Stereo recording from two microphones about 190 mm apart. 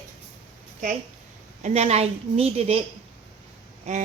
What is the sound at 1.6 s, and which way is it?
Speech, 35° right (ahead or behind).